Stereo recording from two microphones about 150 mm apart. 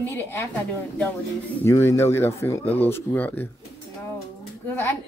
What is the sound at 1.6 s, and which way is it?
Speech, 15° left (ahead or behind).